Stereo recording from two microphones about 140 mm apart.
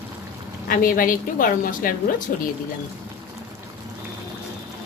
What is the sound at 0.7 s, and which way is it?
A woman's voice, 90° left.